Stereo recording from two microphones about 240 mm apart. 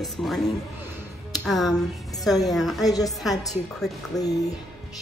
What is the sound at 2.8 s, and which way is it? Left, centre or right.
Speech, centre.